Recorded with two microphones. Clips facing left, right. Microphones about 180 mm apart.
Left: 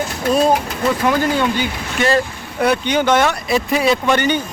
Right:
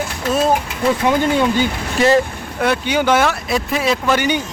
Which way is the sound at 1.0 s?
20° right (ahead or behind).